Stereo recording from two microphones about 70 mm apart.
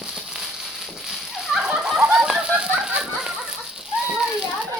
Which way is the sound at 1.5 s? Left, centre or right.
Centre.